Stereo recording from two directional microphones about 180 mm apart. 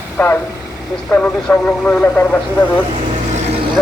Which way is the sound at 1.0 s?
Centre (ahead or behind).